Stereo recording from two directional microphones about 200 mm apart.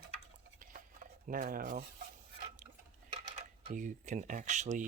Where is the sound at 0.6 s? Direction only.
45° right (ahead or behind).